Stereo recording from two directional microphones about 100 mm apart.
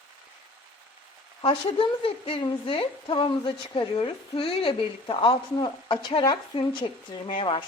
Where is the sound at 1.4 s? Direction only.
65° left (ahead or behind).